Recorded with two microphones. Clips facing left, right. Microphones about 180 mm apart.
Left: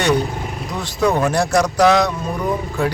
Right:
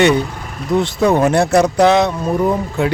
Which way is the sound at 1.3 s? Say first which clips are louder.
Right 4 dB; 60° right (ahead or behind).